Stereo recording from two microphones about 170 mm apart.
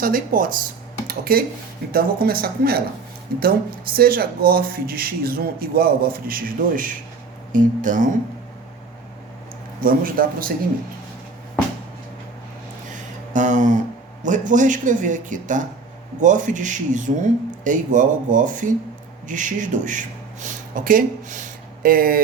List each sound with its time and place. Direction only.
0.0 s speech: 55° right (ahead or behind)
9.8 s speech: 55° right (ahead or behind)
12.9 s a sound: 50° right (ahead or behind)
14.3 s speech: 50° right (ahead or behind)